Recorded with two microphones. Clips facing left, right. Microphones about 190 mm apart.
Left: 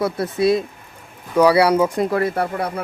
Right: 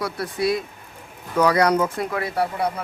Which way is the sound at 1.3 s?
10° left (ahead or behind).